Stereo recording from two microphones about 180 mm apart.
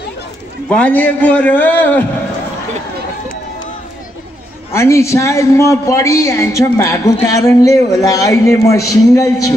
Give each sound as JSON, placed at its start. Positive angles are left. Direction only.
{"t": 0.7, "sound": "a man's voice", "side_deg": 5}
{"t": 4.7, "sound": "a man's voice", "side_deg": 15}